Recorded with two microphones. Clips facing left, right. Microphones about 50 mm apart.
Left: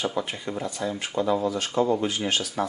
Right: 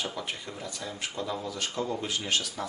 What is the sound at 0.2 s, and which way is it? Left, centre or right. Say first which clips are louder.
Speech: left 7 dB; left.